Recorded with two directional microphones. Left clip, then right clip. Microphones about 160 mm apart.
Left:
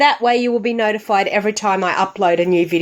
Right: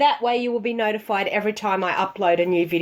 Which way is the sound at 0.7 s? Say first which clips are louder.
Left 6 dB; 30° left (ahead or behind).